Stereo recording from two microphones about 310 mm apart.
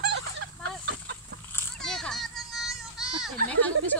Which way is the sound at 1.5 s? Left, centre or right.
Centre.